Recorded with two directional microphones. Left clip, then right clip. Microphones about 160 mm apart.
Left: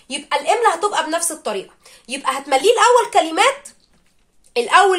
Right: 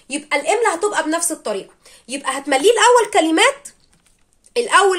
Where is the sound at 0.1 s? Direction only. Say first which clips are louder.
Even; 40° right (ahead or behind).